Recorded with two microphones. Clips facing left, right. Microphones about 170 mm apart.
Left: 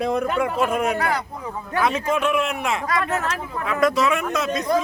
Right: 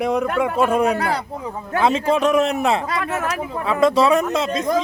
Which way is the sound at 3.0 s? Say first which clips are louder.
Right 1 dB; 10° right (ahead or behind).